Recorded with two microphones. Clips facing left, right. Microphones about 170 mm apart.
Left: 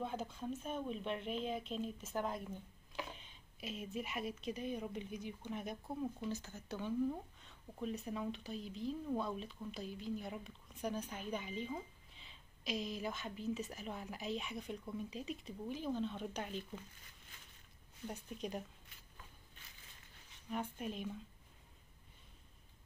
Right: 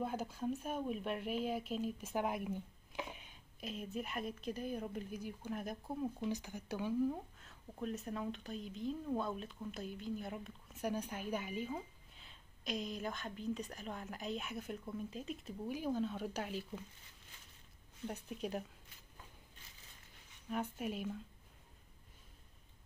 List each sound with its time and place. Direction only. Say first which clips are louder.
0.0 s speech: right 3 dB; 5° right (ahead or behind)
3.6 s speech: right 1 dB; centre (ahead or behind)
6.1 s speech: right 3 dB; 15° right (ahead or behind)
18.1 s speech: right 2 dB; 5° right (ahead or behind)
20.7 s speech: right 2 dB; 5° right (ahead or behind)